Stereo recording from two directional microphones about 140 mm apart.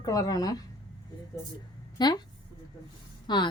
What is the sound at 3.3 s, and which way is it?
Speech, 30° left (ahead or behind).